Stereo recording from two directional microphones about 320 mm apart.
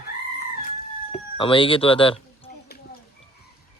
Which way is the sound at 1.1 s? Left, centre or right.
Centre.